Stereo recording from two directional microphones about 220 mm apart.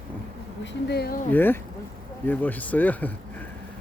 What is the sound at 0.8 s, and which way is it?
Speech, 45° left (ahead or behind).